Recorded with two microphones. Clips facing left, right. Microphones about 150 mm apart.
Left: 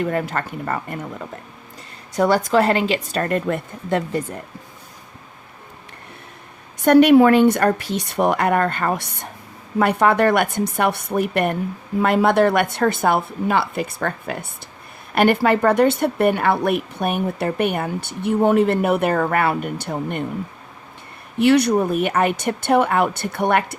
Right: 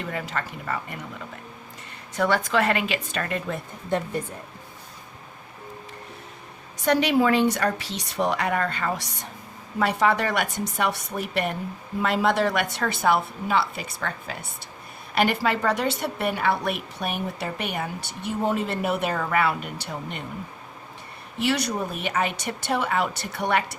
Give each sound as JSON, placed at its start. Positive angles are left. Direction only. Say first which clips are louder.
{"t": 0.0, "sound": "a woman's voice", "louder": "left 8 dB", "side_deg": 50}
{"t": 2.1, "sound": "a woman's voice", "louder": "left 6 dB", "side_deg": 35}
{"t": 3.8, "sound": "speech", "louder": "left 4 dB", "side_deg": 90}
{"t": 6.8, "sound": "a woman's voice", "louder": "left 9 dB", "side_deg": 55}
{"t": 21.3, "sound": "a woman's voice", "louder": "left 10 dB", "side_deg": 60}